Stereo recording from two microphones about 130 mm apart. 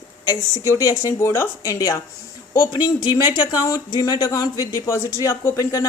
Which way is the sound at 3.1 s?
30° left (ahead or behind).